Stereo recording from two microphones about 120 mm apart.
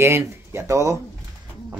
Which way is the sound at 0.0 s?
20° right (ahead or behind).